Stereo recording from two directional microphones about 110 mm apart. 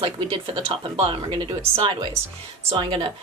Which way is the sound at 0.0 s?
60° right (ahead or behind).